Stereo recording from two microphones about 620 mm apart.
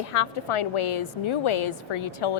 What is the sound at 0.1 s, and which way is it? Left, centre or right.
A woman's voice, left.